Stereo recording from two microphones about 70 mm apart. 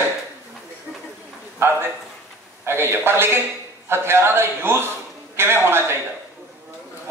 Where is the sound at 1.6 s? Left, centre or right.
Right.